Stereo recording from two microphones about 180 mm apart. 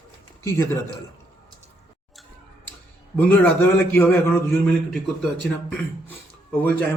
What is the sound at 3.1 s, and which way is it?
A man's voice, 10° left (ahead or behind).